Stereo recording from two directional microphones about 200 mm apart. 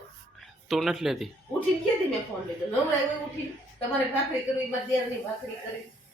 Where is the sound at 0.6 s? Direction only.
Centre (ahead or behind).